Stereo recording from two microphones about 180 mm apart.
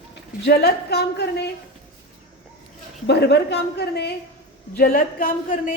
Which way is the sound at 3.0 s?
65° left (ahead or behind).